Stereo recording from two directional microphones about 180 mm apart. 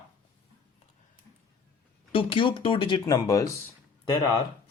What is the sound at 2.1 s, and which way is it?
Speech, 25° left (ahead or behind).